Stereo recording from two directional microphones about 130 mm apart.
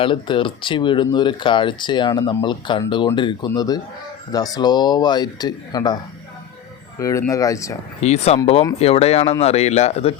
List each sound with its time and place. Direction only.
0.0 s speech: 40° left (ahead or behind)
7.0 s speech: 25° left (ahead or behind)
8.0 s speech: 55° left (ahead or behind)